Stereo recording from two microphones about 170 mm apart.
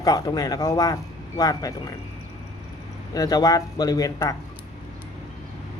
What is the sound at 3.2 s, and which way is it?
Speech, 25° left (ahead or behind).